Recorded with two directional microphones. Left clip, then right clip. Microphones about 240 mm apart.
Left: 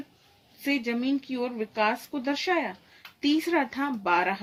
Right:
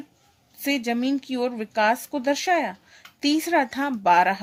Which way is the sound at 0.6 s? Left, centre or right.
Right.